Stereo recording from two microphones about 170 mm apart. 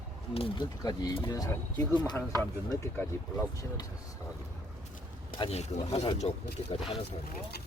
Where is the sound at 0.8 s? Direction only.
20° left (ahead or behind).